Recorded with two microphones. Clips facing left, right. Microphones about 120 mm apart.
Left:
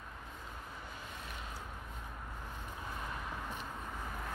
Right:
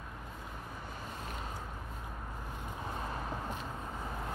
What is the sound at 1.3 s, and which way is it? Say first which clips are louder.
Vehicle: right 4 dB; 40° right (ahead or behind).